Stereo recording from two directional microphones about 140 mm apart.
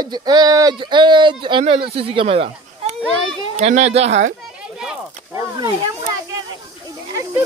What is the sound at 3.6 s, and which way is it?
Speech, 55° right (ahead or behind).